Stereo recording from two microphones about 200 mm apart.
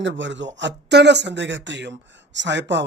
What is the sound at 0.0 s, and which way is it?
A man's voice, 65° right (ahead or behind).